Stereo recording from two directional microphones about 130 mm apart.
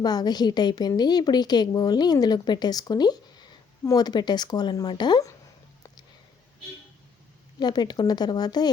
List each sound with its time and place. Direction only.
0.0 s a woman's voice: 30° left (ahead or behind)
7.6 s a woman's voice: 35° left (ahead or behind)